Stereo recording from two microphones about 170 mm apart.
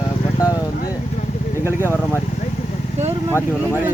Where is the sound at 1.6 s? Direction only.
15° right (ahead or behind).